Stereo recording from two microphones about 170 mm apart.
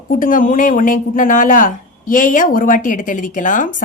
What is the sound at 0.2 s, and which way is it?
Speech, 55° left (ahead or behind).